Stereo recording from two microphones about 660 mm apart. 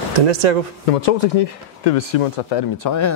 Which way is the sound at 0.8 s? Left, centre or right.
Left.